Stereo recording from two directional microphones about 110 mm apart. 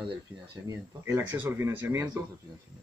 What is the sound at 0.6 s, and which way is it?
Speech, 25° right (ahead or behind).